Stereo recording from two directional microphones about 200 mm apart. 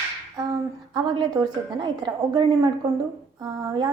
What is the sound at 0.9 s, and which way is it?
A woman's voice, 20° right (ahead or behind).